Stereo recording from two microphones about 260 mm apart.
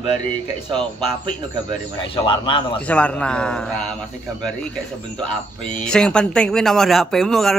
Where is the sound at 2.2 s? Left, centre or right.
Centre.